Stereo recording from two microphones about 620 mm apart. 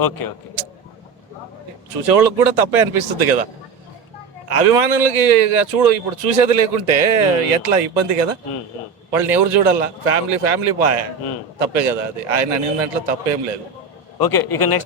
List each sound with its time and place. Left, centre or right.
2.0 s a man's voice: right
14.3 s a man's voice: left